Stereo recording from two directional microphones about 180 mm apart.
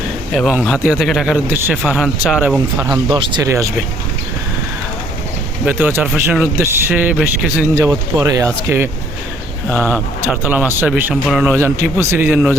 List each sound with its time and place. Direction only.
0.3 s speech: centre (ahead or behind)
1.5 s speech: 10° right (ahead or behind)
3.1 s speech: 25° right (ahead or behind)
5.6 s speech: 10° right (ahead or behind)
7.8 s speech: 15° right (ahead or behind)
9.6 s speech: centre (ahead or behind)
11.5 s speech: 15° right (ahead or behind)